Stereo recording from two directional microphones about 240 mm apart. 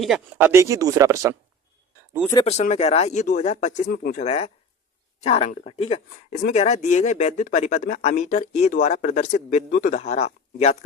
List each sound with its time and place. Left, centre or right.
0.0 s speech: centre
2.3 s speech: left